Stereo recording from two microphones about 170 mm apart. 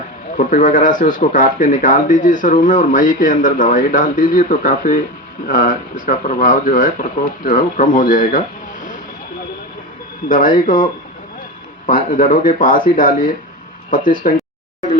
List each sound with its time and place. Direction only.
0.3 s speech: 50° left (ahead or behind)
10.2 s speech: 55° left (ahead or behind)
11.9 s speech: 55° left (ahead or behind)